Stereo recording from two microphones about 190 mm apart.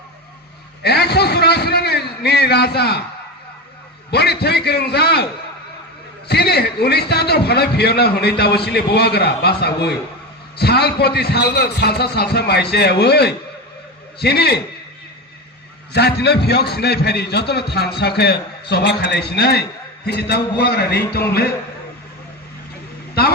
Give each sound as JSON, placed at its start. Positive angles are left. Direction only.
{"t": 0.8, "sound": "a sound", "side_deg": 60}
{"t": 4.1, "sound": "a man's voice", "side_deg": 60}
{"t": 15.9, "sound": "a man's voice", "side_deg": 60}